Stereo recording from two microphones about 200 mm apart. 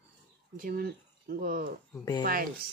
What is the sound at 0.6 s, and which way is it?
Speech, 45° right (ahead or behind).